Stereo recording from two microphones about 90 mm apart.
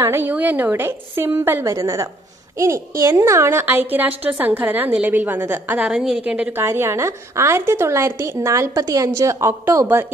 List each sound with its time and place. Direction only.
0.0 s a woman's voice: 30° right (ahead or behind)
1.6 s a woman's voice: 35° right (ahead or behind); by 5.8 s 20° right (ahead or behind)
5.8 s a woman's voice: 5° right (ahead or behind)
6.2 s a woman's voice: 15° right (ahead or behind)
6.6 s a woman's voice: 30° right (ahead or behind)